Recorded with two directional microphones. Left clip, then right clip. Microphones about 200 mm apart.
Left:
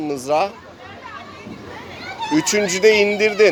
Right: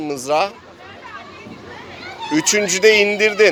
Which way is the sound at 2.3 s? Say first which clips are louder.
Right 1 dB; 5° right (ahead or behind).